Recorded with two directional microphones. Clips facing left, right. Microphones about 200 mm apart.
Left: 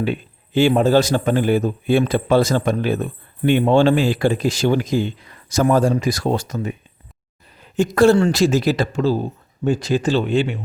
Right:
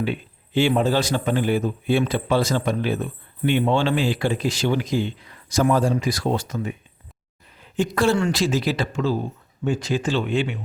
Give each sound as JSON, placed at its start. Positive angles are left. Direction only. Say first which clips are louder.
{"t": 0.0, "sound": "a man's voice", "louder": "left 3 dB", "side_deg": 45}